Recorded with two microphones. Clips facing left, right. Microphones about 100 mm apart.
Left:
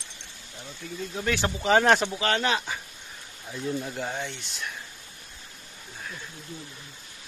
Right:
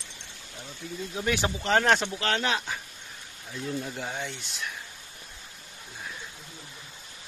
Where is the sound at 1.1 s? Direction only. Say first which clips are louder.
Even; 10° right (ahead or behind).